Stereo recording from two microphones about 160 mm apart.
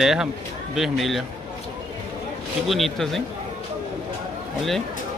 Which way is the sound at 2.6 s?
Centre (ahead or behind).